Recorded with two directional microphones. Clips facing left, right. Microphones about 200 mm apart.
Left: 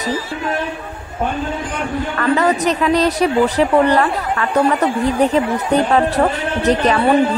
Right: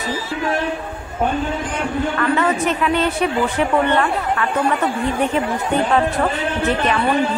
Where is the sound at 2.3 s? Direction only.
40° left (ahead or behind).